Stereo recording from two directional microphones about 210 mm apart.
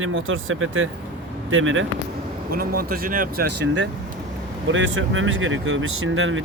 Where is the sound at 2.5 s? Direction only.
45° right (ahead or behind).